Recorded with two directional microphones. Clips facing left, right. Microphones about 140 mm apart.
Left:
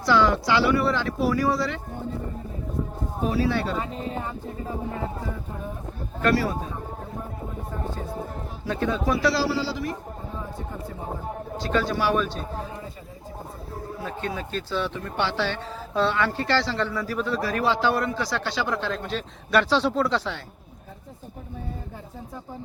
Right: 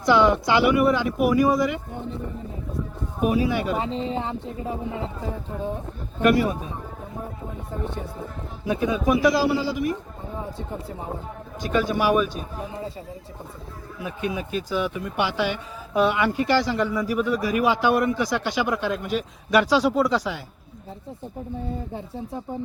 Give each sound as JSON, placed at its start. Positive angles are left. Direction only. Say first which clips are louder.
{"t": 0.0, "sound": "speech", "louder": "right 2 dB", "side_deg": -20}
{"t": 3.2, "sound": "speech", "louder": "right 2 dB", "side_deg": -15}
{"t": 6.2, "sound": "speech", "louder": "right 3 dB", "side_deg": -20}
{"t": 8.6, "sound": "speech", "louder": "right 3 dB", "side_deg": -15}
{"t": 11.6, "sound": "speech", "louder": "right 2 dB", "side_deg": -15}
{"t": 14.0, "sound": "speech", "louder": "right 4 dB", "side_deg": -15}